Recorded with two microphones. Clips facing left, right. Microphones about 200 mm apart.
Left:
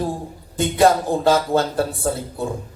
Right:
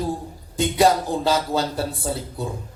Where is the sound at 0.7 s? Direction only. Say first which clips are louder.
Left 3 dB; 50° left (ahead or behind).